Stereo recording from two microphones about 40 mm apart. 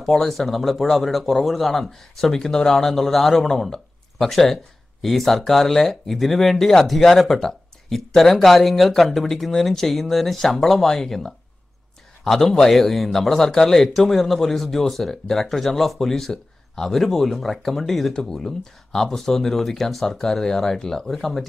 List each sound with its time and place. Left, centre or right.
0.0 s speech: centre
17.0 s speech: centre